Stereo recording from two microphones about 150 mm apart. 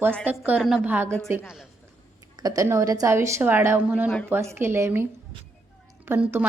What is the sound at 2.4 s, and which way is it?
A woman's voice, 20° right (ahead or behind).